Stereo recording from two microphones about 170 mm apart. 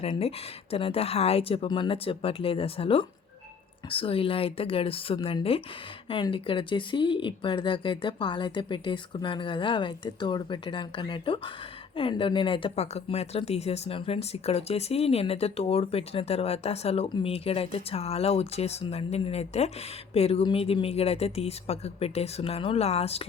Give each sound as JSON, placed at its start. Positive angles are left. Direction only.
{"t": 0.0, "sound": "speech", "side_deg": 35}